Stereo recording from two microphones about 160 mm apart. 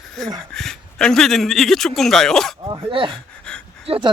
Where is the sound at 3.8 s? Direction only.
35° right (ahead or behind).